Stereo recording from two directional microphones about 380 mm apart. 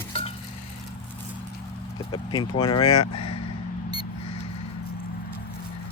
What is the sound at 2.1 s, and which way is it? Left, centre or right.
Speech, centre.